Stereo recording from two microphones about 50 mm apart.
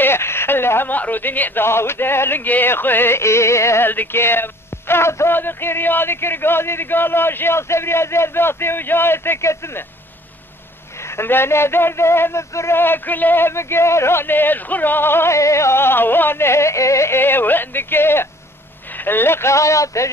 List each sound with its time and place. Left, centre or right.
0.0 s a sound: left
0.9 s a man's voice: left
2.4 s a man's voice: left
3.2 s music: left
3.8 s a man's voice: left
5.3 s a man's voice: left
11.0 s a sound: left
11.2 s music: left
12.7 s a man's voice: left
13.5 s a man's voice: left
15.3 s music: left
17.2 s a man's voice: left
19.5 s speech: left